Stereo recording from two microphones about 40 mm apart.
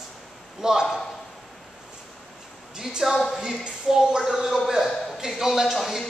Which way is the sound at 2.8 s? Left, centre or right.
Centre.